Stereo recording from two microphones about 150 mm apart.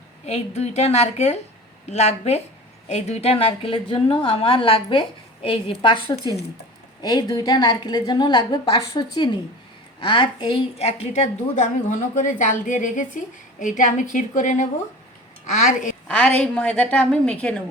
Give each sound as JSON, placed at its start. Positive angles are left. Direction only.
{"t": 0.3, "sound": "a woman's voice", "side_deg": 45}
{"t": 16.0, "sound": "a woman's voice", "side_deg": 5}